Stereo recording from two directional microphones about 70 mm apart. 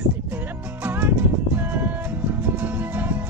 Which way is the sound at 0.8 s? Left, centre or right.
Right.